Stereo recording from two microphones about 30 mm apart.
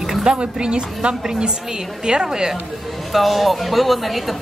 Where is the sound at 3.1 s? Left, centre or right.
Centre.